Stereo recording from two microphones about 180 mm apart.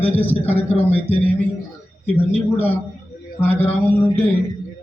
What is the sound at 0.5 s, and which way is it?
Speech, 35° left (ahead or behind).